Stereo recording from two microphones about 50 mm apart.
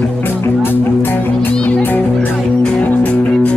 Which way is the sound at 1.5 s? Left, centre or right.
Left.